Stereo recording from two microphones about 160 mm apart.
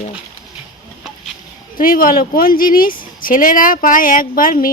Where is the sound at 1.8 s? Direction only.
60° left (ahead or behind).